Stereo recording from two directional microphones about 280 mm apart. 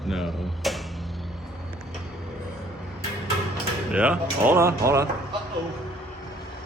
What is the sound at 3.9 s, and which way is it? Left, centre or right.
Speech, centre.